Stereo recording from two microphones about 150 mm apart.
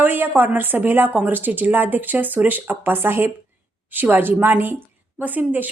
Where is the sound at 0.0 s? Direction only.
15° right (ahead or behind).